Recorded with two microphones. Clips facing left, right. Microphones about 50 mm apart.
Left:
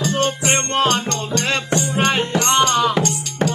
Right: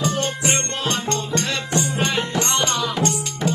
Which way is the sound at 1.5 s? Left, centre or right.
Left.